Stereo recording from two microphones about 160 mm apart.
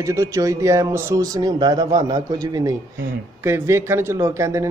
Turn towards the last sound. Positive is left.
turn(degrees=-20)  # may be behind; listen again after turning